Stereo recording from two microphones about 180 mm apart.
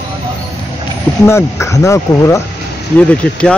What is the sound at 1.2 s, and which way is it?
Speech, 15° left (ahead or behind).